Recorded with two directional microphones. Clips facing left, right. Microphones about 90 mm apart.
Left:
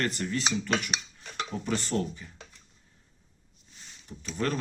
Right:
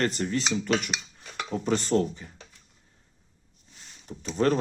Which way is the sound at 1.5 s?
30° right (ahead or behind).